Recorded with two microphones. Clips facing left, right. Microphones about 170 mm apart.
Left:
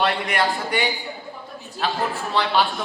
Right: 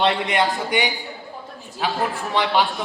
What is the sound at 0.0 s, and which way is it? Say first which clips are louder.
A man's voice: right 2 dB; 20° right (ahead or behind).